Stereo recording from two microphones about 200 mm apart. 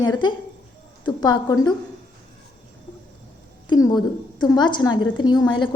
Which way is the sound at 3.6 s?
20° left (ahead or behind).